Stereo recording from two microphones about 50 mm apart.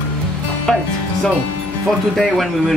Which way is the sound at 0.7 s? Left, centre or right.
Centre.